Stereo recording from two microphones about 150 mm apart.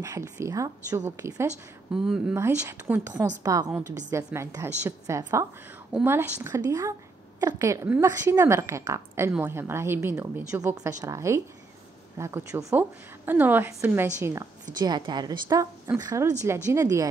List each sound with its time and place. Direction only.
0.0 s speech: 20° right (ahead or behind)
2.0 s speech: 5° right (ahead or behind)
2.3 s a woman's voice: 20° right (ahead or behind)